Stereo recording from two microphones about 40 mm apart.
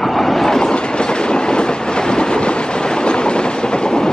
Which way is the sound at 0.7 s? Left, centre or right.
Left.